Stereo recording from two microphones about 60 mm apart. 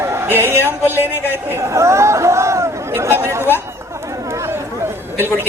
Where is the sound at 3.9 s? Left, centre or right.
Right.